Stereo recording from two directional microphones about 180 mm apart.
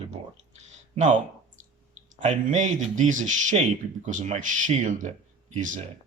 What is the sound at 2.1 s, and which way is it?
Speech, 40° right (ahead or behind).